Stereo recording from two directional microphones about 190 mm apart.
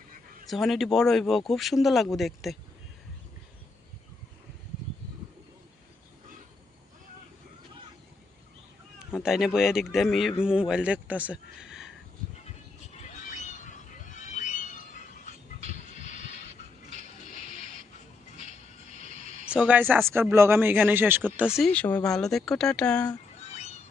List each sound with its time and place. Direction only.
0.4 s speech: centre (ahead or behind)
9.1 s speech: centre (ahead or behind)
12.9 s a sound: 40° left (ahead or behind)
17.0 s toilet flush: 40° right (ahead or behind)
19.5 s speech: 5° right (ahead or behind)
23.5 s a sound: 35° left (ahead or behind)